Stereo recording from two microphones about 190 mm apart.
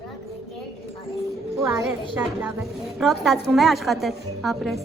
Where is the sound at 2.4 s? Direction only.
5° right (ahead or behind).